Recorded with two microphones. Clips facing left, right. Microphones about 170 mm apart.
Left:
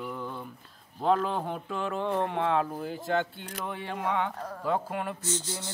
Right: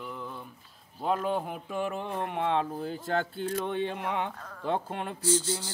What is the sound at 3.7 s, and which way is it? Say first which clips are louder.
Speech: even; 20° right (ahead or behind).